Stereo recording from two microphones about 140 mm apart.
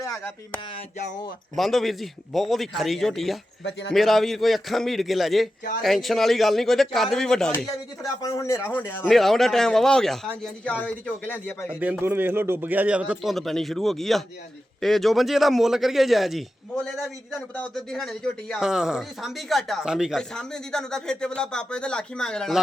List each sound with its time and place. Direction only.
0.0 s a sound: 25° left (ahead or behind)
0.9 s speech: 65° left (ahead or behind)
1.5 s speech: centre (ahead or behind)
8.0 s a man's voice: 20° left (ahead or behind)
9.1 s speech: centre (ahead or behind)
11.8 s a man's voice: 15° right (ahead or behind); by 22.6 s 5° left (ahead or behind)